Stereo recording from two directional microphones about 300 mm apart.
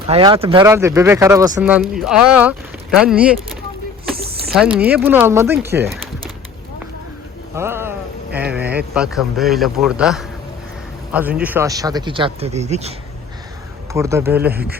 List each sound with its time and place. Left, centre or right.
0.1 s speech: centre
7.5 s speech: centre
13.9 s speech: centre